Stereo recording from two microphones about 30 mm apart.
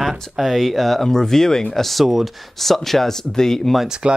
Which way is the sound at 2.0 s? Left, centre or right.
Centre.